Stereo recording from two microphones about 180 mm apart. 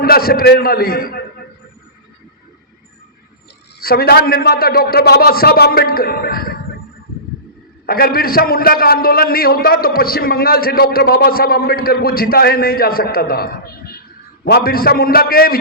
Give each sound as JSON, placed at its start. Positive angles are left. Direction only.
{"t": 0.0, "sound": "a man's voice", "side_deg": 55}
{"t": 3.8, "sound": "a man's voice", "side_deg": 55}
{"t": 7.9, "sound": "a man's voice", "side_deg": 55}